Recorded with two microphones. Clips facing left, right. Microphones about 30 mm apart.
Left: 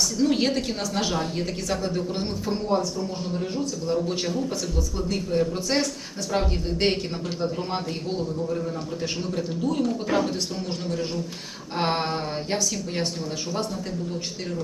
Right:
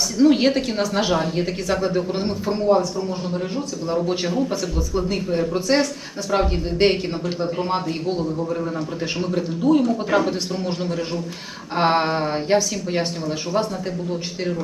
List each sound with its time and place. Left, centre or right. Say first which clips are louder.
0.2 s speech: right 8 dB; centre
4.0 s speech: right 5 dB; centre
9.3 s speech: right 10 dB; centre
11.8 s speech: right 7 dB; centre